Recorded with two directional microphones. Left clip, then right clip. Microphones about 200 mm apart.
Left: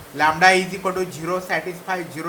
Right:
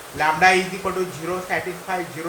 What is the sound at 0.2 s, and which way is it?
Speech, 15° left (ahead or behind).